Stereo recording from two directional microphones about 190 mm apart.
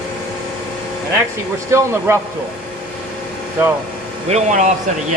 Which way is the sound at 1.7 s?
15° right (ahead or behind).